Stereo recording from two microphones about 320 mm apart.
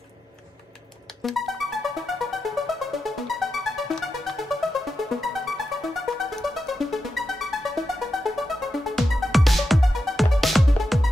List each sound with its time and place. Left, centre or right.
1.2 s music: centre